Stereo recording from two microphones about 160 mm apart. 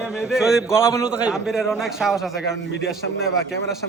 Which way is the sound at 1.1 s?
5° right (ahead or behind).